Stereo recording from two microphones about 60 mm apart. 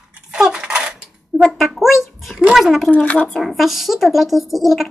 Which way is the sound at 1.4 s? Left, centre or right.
Centre.